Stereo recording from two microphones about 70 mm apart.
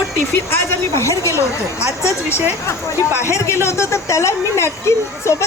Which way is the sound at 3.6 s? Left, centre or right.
Left.